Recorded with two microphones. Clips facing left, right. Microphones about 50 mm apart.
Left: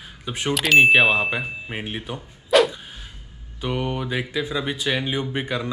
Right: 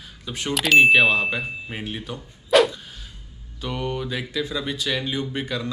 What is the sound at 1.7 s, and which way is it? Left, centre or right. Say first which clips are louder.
Speech: left 1 dB; centre.